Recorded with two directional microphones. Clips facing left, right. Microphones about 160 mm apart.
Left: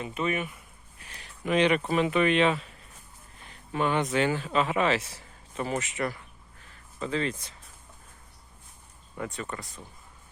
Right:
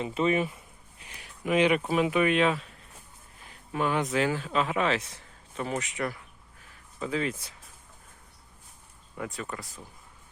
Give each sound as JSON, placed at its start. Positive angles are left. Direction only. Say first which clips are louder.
{"t": 0.0, "sound": "bee", "louder": "right 4 dB", "side_deg": -30}
{"t": 1.0, "sound": "speech", "louder": "even", "side_deg": -10}
{"t": 9.1, "sound": "speech", "louder": "left 1 dB", "side_deg": 0}